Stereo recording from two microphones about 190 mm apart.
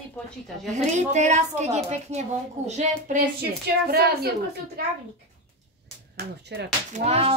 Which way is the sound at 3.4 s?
55° right (ahead or behind).